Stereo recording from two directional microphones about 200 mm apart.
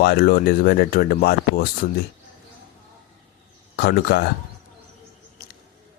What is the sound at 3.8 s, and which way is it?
Speech, 55° left (ahead or behind).